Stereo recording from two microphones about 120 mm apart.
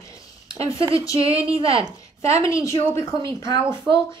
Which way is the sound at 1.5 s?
50° right (ahead or behind).